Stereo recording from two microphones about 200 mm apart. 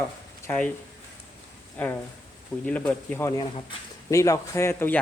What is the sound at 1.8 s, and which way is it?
A man's voice, 10° left (ahead or behind).